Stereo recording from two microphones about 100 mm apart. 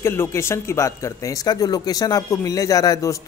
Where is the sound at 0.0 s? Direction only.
25° left (ahead or behind).